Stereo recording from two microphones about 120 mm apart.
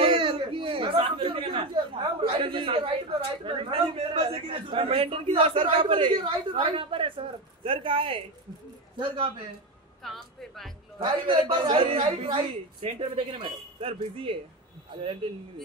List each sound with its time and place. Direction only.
0.0 s a man's voice: 50° right (ahead or behind)
10.0 s speech: centre (ahead or behind)
11.1 s a man's voice: 45° right (ahead or behind)